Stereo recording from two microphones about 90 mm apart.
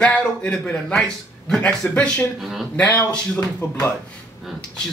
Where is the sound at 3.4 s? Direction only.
30° left (ahead or behind).